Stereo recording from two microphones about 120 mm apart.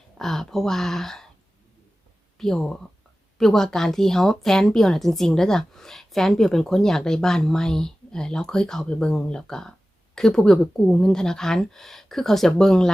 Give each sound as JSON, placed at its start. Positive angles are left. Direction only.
{"t": 0.2, "sound": "speech", "side_deg": 5}
{"t": 2.4, "sound": "speech", "side_deg": 5}